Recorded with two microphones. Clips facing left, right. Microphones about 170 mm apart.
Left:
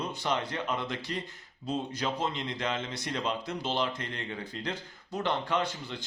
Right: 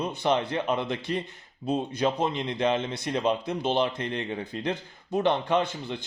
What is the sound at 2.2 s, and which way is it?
Speech, 20° right (ahead or behind).